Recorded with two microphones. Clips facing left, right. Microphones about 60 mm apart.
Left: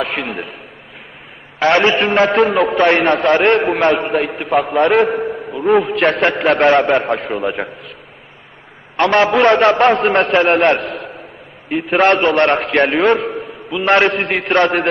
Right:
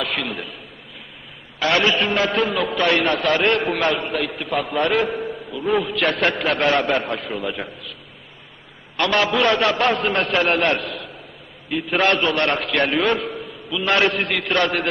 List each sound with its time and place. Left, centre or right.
0.0 s a man's voice: left
1.5 s a man's voice: left
9.0 s a man's voice: left